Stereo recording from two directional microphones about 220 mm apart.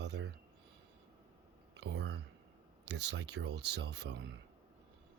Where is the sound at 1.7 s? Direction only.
50° right (ahead or behind).